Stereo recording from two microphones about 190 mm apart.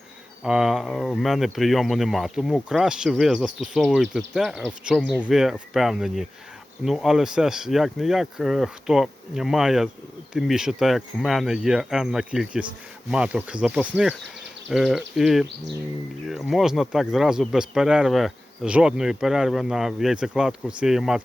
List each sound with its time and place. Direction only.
0.4 s speech: centre (ahead or behind)